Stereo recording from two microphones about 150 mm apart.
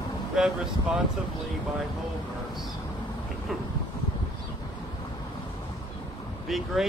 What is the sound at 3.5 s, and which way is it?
Speech, centre (ahead or behind).